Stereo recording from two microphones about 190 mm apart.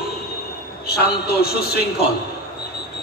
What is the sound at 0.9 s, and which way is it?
A man's voice, 55° left (ahead or behind).